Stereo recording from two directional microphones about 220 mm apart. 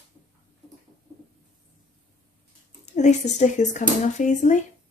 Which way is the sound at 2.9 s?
30° left (ahead or behind).